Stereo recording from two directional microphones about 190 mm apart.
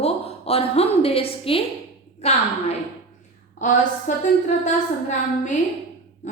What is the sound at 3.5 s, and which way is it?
Speech, 40° left (ahead or behind).